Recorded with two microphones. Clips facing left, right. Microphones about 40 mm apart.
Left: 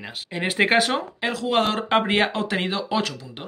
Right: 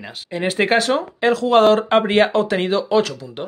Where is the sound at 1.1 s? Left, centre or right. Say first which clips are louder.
Right 9 dB; centre.